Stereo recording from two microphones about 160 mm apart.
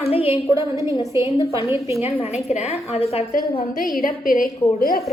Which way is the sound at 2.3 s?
45° left (ahead or behind).